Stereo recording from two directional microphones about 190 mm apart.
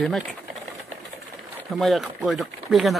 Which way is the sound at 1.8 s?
Centre (ahead or behind).